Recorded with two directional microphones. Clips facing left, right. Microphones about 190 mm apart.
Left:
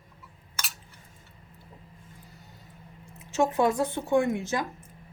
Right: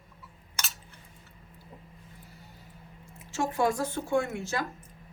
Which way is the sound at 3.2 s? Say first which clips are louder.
Left 4 dB; 20° left (ahead or behind).